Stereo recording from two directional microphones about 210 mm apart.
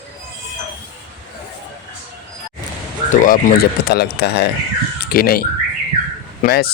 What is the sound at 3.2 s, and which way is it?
Speech, 40° left (ahead or behind).